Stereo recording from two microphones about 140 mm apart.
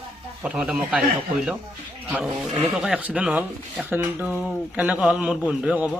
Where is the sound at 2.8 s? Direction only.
5° right (ahead or behind).